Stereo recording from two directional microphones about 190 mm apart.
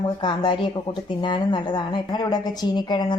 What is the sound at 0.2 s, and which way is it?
A woman's voice, 25° left (ahead or behind).